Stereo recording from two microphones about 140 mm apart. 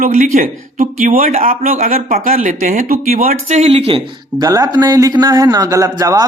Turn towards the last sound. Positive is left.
turn(degrees=-25)  # may be behind; listen again after turning